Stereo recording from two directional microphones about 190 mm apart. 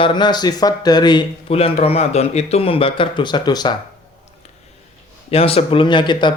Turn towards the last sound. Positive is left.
turn(degrees=25)  # may be behind; listen again after turning